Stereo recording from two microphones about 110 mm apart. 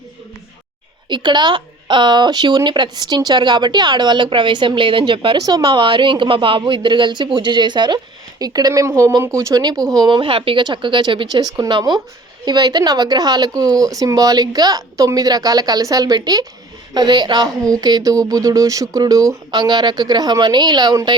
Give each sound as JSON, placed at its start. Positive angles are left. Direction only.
{"t": 1.1, "sound": "speech", "side_deg": -45}